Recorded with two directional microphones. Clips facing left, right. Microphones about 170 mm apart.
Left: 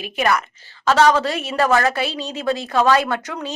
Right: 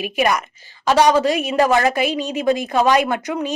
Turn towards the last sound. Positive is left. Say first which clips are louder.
# right 4 dB
turn(degrees=-15)  # may be behind; listen again after turning